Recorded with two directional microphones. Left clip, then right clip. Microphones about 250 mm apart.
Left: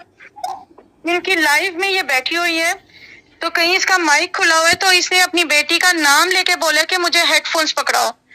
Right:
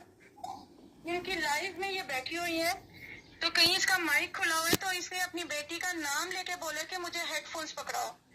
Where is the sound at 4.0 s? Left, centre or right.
Left.